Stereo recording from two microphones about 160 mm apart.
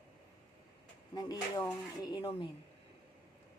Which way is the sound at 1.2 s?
25° left (ahead or behind).